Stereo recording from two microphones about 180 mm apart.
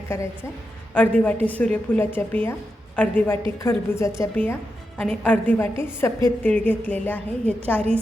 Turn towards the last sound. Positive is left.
turn(degrees=10)  # may be behind; listen again after turning